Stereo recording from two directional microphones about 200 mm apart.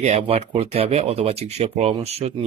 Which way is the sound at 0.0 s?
30° right (ahead or behind).